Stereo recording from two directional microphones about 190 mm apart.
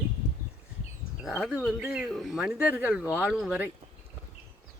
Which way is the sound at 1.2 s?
5° right (ahead or behind).